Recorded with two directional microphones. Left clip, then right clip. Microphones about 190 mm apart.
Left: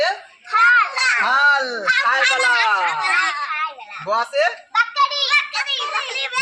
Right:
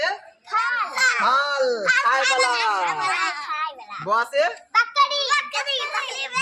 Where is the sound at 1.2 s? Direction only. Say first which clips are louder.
Left 4 dB; 30° right (ahead or behind).